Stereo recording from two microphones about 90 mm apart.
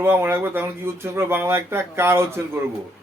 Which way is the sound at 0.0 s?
25° right (ahead or behind).